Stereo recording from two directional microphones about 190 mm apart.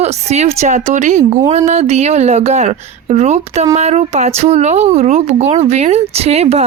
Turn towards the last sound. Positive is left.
turn(degrees=-35)  # may be behind; listen again after turning